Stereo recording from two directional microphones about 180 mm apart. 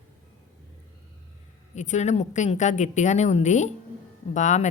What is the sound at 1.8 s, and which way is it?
A woman's voice, 40° left (ahead or behind).